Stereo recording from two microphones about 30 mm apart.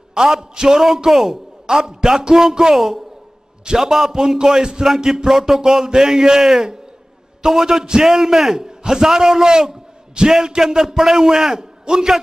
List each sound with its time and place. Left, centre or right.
0.2 s speech: centre
1.7 s a man's voice: right
8.1 s speech: centre
8.5 s a man's voice: right
11.8 s a man's voice: right